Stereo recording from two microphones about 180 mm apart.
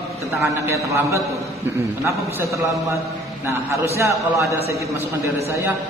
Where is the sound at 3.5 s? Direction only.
15° right (ahead or behind).